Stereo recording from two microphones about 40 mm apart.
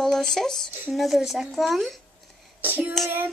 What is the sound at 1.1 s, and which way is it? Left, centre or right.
Speech, centre.